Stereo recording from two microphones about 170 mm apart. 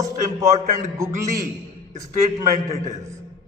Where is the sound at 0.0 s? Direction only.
20° right (ahead or behind).